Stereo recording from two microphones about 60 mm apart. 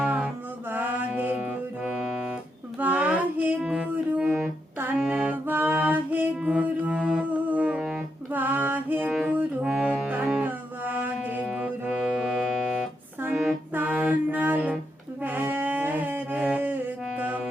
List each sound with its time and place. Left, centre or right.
0.0 s mantra: centre
0.7 s music: right
1.9 s music: centre
2.7 s child singing: right
3.6 s music: centre
4.3 s music: centre
4.9 s music: centre
11.5 s music: centre
13.7 s music: right
15.2 s brass instrument: right
17.2 s music: right